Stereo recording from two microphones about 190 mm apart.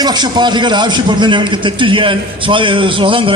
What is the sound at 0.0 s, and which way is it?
A man's voice, 20° right (ahead or behind).